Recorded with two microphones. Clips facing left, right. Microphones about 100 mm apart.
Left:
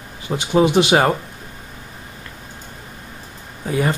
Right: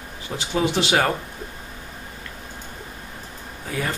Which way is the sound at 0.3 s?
30° left (ahead or behind).